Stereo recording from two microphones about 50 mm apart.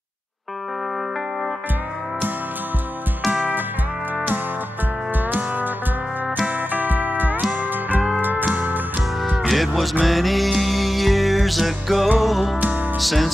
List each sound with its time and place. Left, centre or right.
5.1 s music: right
6.7 s music: right
9.5 s music: centre